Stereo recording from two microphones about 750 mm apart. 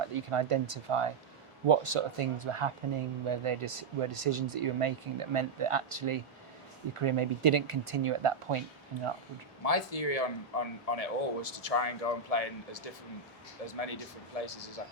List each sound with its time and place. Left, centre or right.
0.1 s speech: right
9.6 s a man's voice: left
14.4 s speech: left